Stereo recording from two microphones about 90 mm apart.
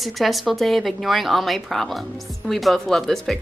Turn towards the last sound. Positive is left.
turn(degrees=5)  # may be behind; listen again after turning